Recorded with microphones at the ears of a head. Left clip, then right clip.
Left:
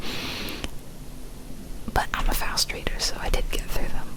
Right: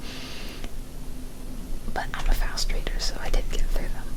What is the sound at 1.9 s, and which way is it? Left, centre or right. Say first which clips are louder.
Whispering: left 6 dB; left.